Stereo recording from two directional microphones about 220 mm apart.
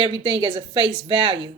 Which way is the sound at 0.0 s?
25° right (ahead or behind).